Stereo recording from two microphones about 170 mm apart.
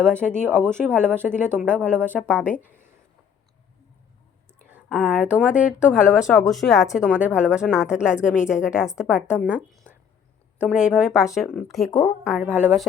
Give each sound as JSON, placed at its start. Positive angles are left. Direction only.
{"t": 0.2, "sound": "speech", "side_deg": 0}
{"t": 4.7, "sound": "speech", "side_deg": -5}
{"t": 11.9, "sound": "a woman's voice", "side_deg": 20}
{"t": 12.2, "sound": "speech", "side_deg": -5}